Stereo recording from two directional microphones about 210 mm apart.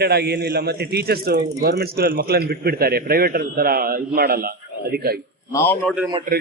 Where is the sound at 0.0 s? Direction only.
50° right (ahead or behind).